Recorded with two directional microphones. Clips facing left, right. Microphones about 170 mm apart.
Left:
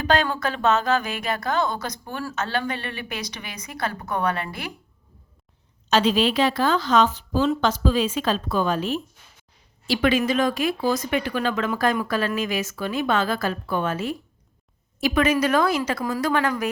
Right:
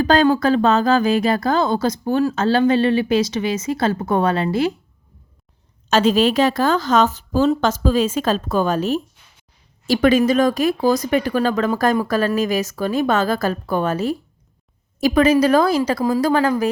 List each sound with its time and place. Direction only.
0.0 s speech: 35° right (ahead or behind)
5.9 s a woman's voice: 45° right (ahead or behind)